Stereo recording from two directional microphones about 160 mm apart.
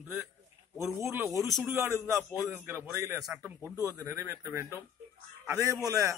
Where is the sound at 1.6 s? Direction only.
15° right (ahead or behind).